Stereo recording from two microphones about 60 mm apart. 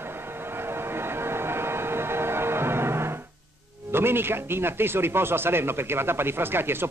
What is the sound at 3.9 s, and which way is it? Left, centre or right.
A man's voice, right.